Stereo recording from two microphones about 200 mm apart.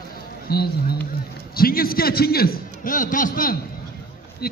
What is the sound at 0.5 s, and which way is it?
A man's voice, 50° left (ahead or behind).